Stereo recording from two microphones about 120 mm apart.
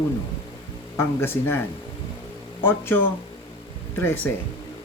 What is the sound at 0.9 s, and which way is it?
Speech, 20° left (ahead or behind).